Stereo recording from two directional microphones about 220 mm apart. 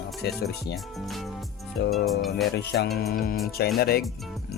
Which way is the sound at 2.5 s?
50° left (ahead or behind).